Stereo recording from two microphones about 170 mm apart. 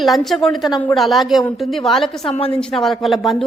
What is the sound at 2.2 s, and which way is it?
Speech, 35° left (ahead or behind).